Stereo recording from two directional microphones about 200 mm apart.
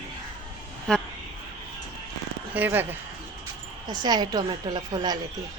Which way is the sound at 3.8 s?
20° right (ahead or behind).